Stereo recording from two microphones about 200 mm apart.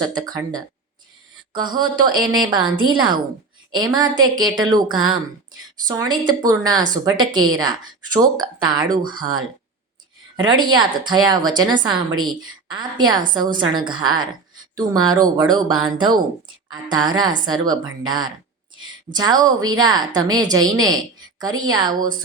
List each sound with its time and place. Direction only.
0.0 s a woman's voice: 20° right (ahead or behind)
10.3 s a woman's voice: 20° right (ahead or behind)